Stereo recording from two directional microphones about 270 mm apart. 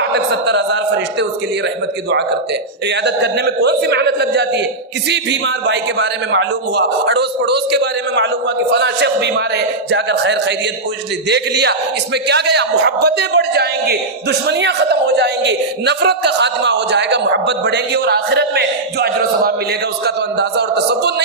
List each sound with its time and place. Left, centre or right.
0.1 s a man's voice: right
2.8 s a man's voice: right